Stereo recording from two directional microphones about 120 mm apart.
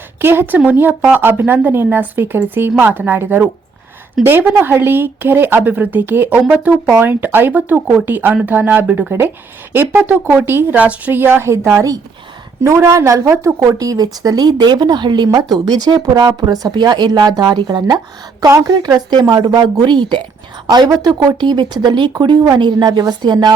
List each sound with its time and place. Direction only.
0.2 s speech: 20° right (ahead or behind); by 23.6 s 35° right (ahead or behind)